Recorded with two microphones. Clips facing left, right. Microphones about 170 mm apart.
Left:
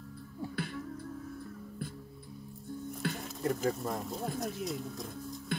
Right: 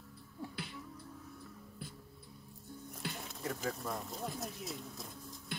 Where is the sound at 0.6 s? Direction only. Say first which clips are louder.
Left 8 dB; 50° left (ahead or behind).